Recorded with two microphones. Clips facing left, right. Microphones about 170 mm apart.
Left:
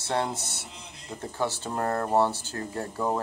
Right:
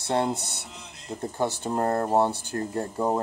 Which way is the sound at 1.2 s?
20° right (ahead or behind).